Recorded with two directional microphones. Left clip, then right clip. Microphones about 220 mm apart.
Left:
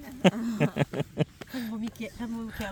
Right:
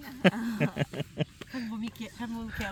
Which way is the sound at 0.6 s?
15° left (ahead or behind).